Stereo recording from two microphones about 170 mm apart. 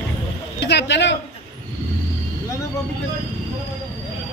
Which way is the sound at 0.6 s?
90° left.